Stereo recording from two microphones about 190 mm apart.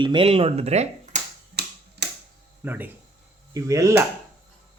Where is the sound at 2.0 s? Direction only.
65° right (ahead or behind).